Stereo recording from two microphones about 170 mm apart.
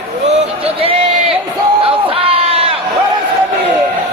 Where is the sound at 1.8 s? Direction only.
35° right (ahead or behind).